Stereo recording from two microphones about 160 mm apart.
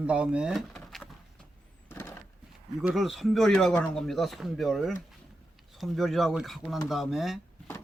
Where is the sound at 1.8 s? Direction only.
15° left (ahead or behind).